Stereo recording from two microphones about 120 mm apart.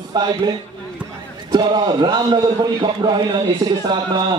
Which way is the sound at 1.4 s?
35° right (ahead or behind).